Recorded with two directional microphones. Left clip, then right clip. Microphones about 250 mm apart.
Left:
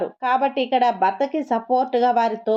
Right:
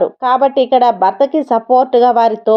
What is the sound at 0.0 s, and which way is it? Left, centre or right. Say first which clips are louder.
Speech: right 8 dB; centre.